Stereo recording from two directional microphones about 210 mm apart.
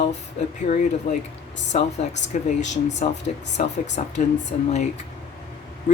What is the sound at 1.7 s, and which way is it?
Speech, 35° left (ahead or behind).